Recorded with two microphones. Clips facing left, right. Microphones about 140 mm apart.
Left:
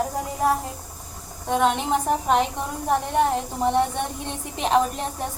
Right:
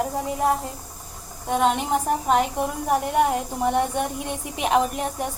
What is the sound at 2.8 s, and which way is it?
A woman's voice, 10° right (ahead or behind).